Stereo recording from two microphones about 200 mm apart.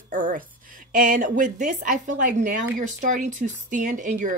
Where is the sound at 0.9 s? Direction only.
45° right (ahead or behind).